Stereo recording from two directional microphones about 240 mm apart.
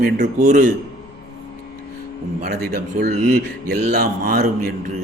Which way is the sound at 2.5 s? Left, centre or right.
Right.